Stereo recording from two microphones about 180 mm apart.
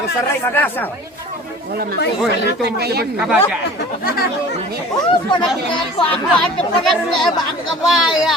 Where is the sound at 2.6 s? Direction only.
60° right (ahead or behind).